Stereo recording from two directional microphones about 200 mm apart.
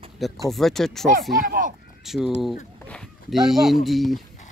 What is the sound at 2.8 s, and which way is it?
Speech, 5° left (ahead or behind).